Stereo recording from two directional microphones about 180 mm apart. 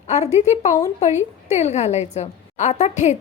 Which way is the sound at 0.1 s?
40° left (ahead or behind).